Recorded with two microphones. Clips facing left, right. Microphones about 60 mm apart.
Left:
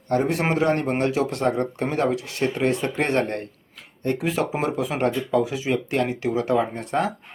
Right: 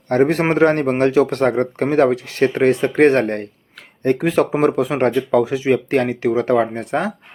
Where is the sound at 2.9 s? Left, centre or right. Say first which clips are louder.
Right 9 dB; right.